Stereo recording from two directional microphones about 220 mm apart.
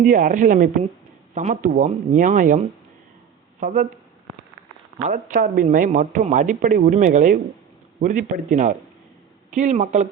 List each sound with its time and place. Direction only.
0.0 s speech: 35° right (ahead or behind)
5.0 s speech: 35° right (ahead or behind)